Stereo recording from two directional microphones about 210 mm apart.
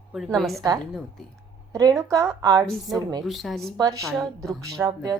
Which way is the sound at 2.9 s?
Centre (ahead or behind).